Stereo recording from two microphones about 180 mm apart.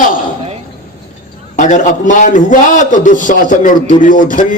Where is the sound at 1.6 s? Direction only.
45° left (ahead or behind).